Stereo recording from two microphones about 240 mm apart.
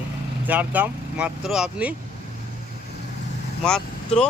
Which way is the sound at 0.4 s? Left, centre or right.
Centre.